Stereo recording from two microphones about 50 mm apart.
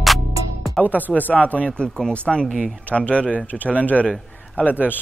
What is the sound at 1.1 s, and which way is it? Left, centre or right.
Speech, left.